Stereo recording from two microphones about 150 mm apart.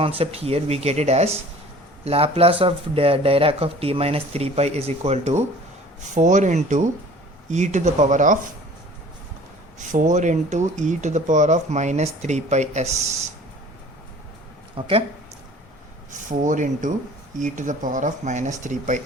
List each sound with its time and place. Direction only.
0.0 s speech: 40° right (ahead or behind); by 8.4 s 55° right (ahead or behind)
9.7 s speech: 55° right (ahead or behind)
14.8 s speech: 35° right (ahead or behind)
16.3 s speech: 55° right (ahead or behind)